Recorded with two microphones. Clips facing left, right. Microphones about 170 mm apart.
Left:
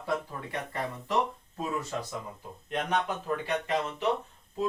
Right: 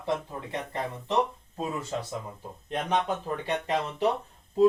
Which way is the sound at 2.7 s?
30° right (ahead or behind).